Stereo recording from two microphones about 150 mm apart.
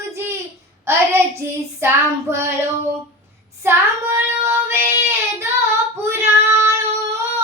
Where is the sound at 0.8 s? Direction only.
15° right (ahead or behind).